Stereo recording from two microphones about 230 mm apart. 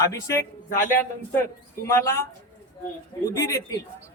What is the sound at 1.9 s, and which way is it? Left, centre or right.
A man's voice, centre.